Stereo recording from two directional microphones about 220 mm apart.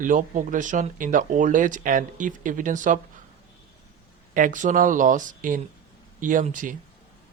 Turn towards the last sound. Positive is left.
turn(degrees=-35)  # may be behind; listen again after turning